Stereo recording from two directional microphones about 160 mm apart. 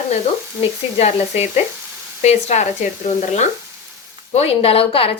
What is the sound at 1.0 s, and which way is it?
Speech, 45° left (ahead or behind).